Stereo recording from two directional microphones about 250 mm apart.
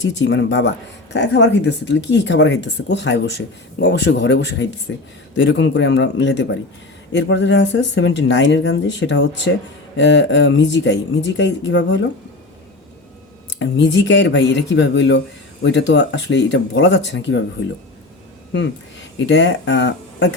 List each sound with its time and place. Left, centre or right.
0.2 s speech: left
13.6 s speech: left
19.2 s speech: left